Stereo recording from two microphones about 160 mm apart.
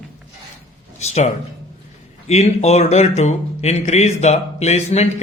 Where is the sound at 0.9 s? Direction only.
45° left (ahead or behind).